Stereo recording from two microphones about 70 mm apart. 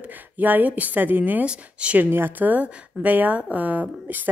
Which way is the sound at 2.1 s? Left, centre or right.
Right.